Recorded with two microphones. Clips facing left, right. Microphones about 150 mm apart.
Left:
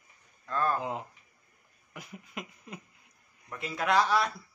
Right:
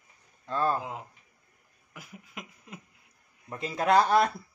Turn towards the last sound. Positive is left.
turn(degrees=-50)  # may be behind; listen again after turning